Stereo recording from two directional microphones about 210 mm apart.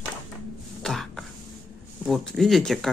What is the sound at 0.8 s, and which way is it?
Throat clearing, centre (ahead or behind).